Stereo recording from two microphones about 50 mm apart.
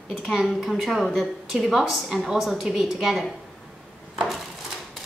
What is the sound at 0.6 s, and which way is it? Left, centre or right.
A woman's voice, centre.